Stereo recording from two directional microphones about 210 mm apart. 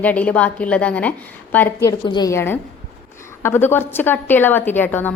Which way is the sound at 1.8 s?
20° left (ahead or behind).